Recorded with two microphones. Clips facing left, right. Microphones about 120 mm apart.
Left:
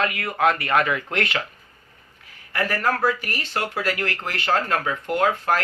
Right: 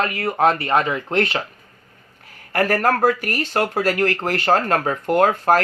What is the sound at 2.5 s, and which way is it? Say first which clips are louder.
Speech: right 5 dB; 45° right (ahead or behind).